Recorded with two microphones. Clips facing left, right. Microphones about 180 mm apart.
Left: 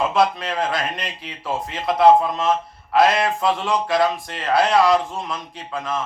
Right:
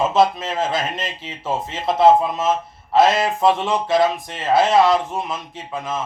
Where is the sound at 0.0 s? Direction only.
25° right (ahead or behind).